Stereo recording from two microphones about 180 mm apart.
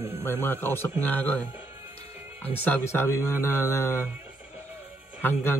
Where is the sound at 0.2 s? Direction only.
10° left (ahead or behind).